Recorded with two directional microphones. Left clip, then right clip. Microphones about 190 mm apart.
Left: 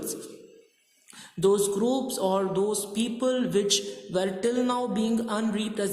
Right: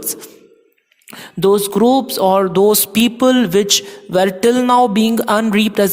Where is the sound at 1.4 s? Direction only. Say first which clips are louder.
Right 10 dB; 35° right (ahead or behind).